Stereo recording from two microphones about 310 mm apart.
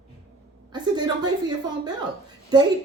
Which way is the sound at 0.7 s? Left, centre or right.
Centre.